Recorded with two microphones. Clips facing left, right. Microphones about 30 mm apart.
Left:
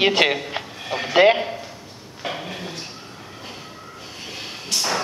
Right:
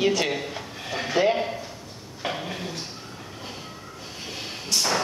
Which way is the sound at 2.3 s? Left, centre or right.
Centre.